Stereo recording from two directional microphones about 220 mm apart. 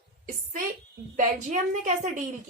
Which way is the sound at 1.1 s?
35° right (ahead or behind).